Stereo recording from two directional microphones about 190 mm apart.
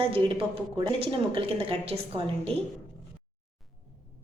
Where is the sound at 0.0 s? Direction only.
30° right (ahead or behind).